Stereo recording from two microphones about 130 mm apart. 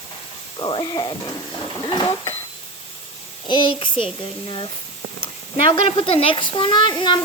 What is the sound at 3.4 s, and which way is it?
Speech, 35° left (ahead or behind).